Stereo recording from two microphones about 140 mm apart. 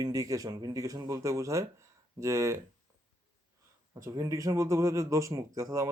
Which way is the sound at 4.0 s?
25° right (ahead or behind).